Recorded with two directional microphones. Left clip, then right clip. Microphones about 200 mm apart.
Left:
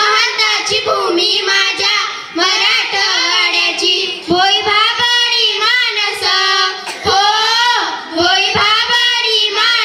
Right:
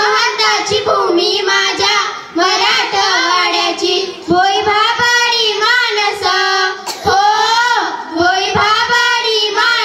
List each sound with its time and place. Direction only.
0.0 s child singing: 60° right (ahead or behind)